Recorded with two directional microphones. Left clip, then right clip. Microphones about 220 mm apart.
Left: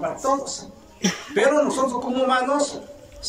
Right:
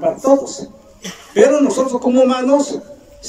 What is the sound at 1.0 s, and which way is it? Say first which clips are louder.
Speech: left 6 dB; 50° left (ahead or behind).